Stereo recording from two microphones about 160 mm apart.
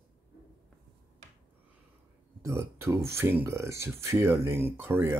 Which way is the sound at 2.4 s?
20° right (ahead or behind).